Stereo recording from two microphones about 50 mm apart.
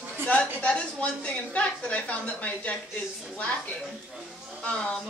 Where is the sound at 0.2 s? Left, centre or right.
Left.